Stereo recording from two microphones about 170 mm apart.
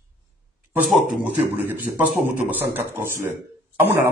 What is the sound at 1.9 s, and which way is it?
A man's voice, 20° right (ahead or behind).